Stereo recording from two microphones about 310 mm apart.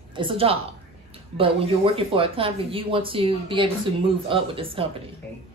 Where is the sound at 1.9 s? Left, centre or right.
Centre.